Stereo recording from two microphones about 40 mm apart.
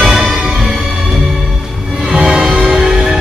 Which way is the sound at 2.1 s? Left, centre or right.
Centre.